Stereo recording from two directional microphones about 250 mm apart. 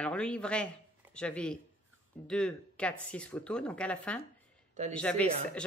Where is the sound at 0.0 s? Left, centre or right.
Centre.